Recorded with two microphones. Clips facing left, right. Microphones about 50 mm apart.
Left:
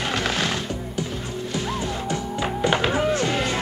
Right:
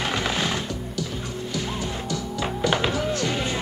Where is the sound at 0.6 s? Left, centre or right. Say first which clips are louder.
Left 2 dB; left.